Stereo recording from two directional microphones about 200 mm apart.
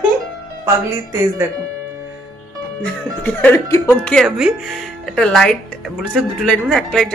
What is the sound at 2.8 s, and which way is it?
Speech, 5° left (ahead or behind).